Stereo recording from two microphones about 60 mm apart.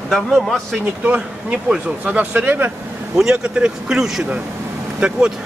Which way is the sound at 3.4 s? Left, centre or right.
Centre.